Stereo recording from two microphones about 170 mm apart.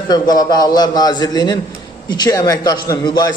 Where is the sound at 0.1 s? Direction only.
25° left (ahead or behind).